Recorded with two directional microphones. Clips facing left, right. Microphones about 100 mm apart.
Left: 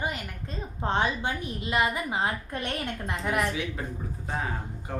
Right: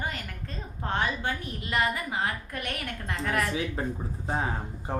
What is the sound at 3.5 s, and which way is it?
A woman's voice, 35° right (ahead or behind).